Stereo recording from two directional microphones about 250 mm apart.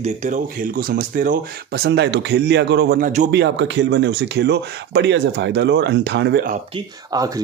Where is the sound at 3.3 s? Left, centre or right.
Right.